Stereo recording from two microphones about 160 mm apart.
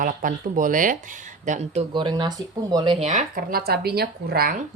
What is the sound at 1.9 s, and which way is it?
Speech, 30° right (ahead or behind).